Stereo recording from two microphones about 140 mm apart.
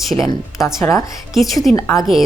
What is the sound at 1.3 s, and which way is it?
Speech, centre (ahead or behind).